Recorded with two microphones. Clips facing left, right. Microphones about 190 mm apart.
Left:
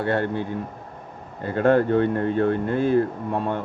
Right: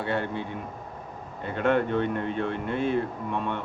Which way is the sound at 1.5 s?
35° left (ahead or behind).